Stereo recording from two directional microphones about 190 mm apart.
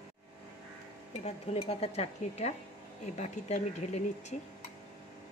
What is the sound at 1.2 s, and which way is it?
Speech, 30° left (ahead or behind).